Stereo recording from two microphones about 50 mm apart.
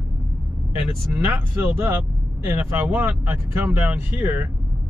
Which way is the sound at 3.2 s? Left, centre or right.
Right.